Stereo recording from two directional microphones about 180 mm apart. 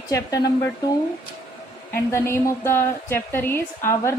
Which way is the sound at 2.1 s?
15° left (ahead or behind).